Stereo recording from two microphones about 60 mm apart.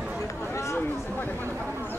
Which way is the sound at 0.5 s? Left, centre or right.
Left.